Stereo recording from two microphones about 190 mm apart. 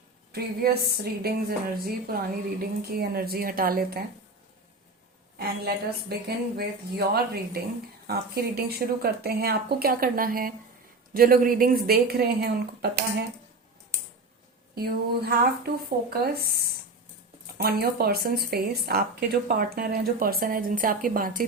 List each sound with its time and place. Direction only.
0.3 s a woman's voice: 55° right (ahead or behind)
5.4 s a woman's voice: 55° right (ahead or behind)
14.8 s a woman's voice: 55° right (ahead or behind)